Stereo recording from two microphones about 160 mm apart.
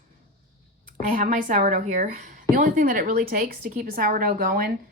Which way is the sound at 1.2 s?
55° right (ahead or behind).